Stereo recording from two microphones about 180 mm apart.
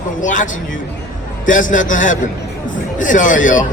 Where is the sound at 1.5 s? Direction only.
45° left (ahead or behind).